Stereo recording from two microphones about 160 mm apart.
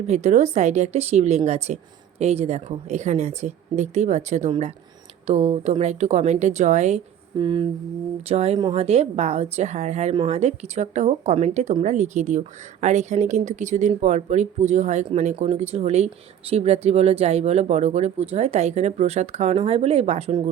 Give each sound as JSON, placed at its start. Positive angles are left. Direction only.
{"t": 0.1, "sound": "speech", "side_deg": -45}
{"t": 7.3, "sound": "a sound", "side_deg": -30}
{"t": 8.3, "sound": "speech", "side_deg": -40}